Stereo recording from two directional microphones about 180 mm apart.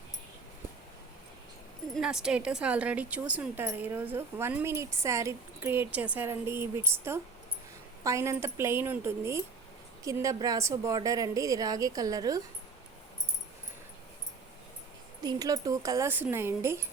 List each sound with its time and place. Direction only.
1.9 s a woman's voice: 5° right (ahead or behind); by 12.4 s 20° right (ahead or behind)
15.2 s a woman's voice: 20° right (ahead or behind)